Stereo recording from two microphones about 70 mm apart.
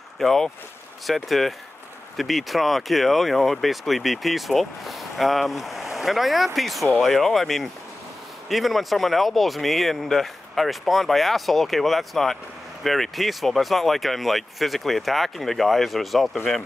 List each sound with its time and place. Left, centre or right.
0.2 s speech: centre